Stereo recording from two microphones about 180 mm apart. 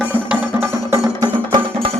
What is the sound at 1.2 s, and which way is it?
Music, 25° right (ahead or behind).